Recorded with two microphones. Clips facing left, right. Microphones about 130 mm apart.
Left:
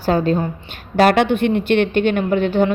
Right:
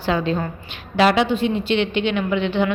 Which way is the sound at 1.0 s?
55° left (ahead or behind).